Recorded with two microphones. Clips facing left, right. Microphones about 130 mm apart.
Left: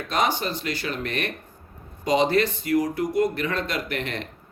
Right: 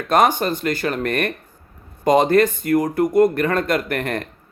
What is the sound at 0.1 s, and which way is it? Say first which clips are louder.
Speech: right 8 dB; 50° right (ahead or behind).